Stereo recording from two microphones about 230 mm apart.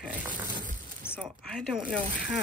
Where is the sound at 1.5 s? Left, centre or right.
Centre.